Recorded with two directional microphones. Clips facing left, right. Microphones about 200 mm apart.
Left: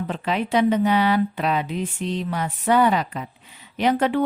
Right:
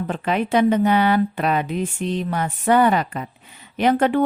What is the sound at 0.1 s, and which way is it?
Speech, 50° right (ahead or behind).